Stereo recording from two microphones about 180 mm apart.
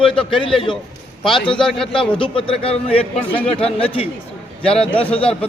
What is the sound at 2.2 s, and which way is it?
Speech, 30° left (ahead or behind).